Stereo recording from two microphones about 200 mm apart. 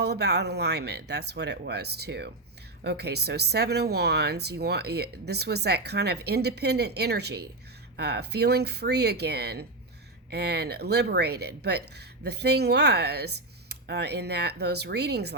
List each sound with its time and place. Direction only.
0.0 s speech: 55° right (ahead or behind)